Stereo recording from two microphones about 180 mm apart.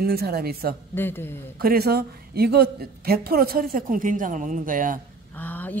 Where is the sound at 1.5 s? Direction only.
60° right (ahead or behind).